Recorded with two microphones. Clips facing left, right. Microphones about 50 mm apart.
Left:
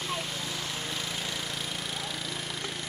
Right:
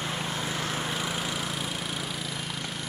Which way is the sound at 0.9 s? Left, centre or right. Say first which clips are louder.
Right 4 dB; centre.